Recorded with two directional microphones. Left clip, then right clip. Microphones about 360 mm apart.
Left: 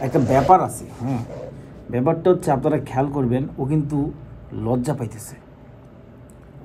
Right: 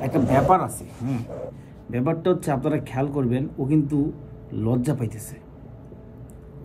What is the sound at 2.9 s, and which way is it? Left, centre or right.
A man's voice, centre.